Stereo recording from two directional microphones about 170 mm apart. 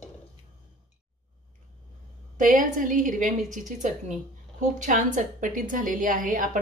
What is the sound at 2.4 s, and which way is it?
A woman's voice, 50° right (ahead or behind).